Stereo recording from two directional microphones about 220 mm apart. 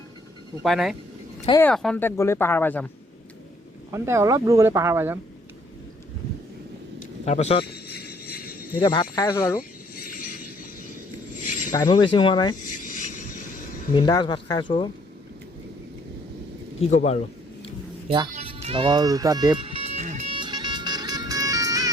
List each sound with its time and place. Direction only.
0.6 s speech: centre (ahead or behind)
3.9 s speech: 15° right (ahead or behind)
7.3 s speech: 30° left (ahead or behind)
7.6 s music: 45° left (ahead or behind)
8.8 s speech: 20° left (ahead or behind)
9.6 s a sound: 40° left (ahead or behind)
11.7 s speech: 20° left (ahead or behind)
12.8 s vehicle: 35° left (ahead or behind)
13.9 s speech: 20° left (ahead or behind)
16.9 s speech: 30° left (ahead or behind)
18.1 s speech: 25° right (ahead or behind)
19.5 s music: 25° right (ahead or behind)